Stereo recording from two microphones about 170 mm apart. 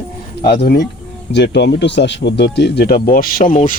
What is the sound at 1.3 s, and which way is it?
Speech, 90° left.